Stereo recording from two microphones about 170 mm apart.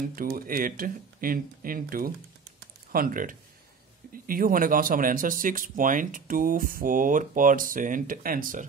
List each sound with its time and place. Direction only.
0.1 s speech: 55° right (ahead or behind)